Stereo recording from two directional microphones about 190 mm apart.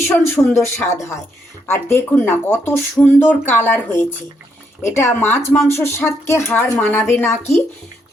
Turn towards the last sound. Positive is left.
turn(degrees=10)  # may be behind; listen again after turning